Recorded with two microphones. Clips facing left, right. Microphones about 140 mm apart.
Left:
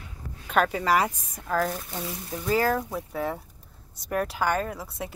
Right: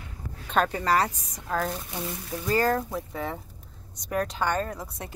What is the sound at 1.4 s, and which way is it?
Speech, centre (ahead or behind).